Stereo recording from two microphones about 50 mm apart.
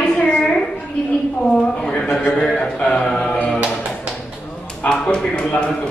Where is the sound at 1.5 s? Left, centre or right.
Centre.